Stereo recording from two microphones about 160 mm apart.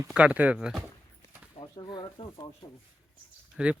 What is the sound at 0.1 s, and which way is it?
Speech, 10° right (ahead or behind).